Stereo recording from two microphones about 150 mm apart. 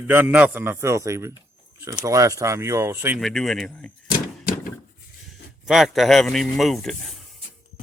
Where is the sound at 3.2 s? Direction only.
5° left (ahead or behind).